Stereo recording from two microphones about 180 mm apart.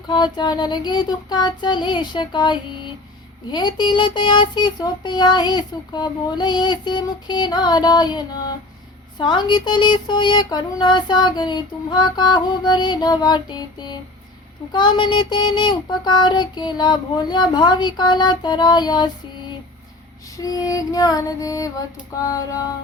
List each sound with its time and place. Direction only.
0.1 s speech: 25° left (ahead or behind)
20.3 s speech: 20° left (ahead or behind)